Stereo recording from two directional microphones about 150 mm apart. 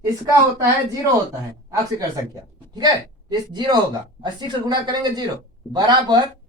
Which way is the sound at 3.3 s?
30° right (ahead or behind).